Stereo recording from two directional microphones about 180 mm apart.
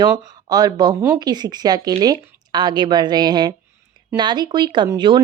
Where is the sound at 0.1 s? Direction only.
20° right (ahead or behind).